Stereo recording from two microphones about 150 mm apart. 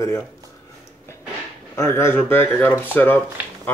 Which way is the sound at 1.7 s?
15° left (ahead or behind).